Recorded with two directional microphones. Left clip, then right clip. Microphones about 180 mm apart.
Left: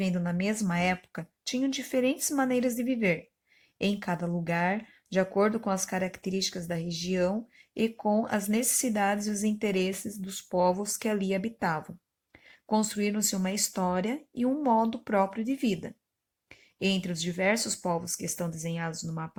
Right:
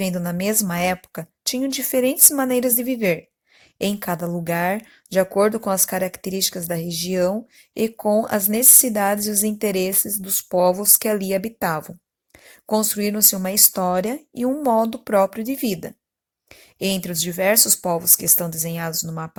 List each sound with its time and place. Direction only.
0.0 s speech: 35° right (ahead or behind)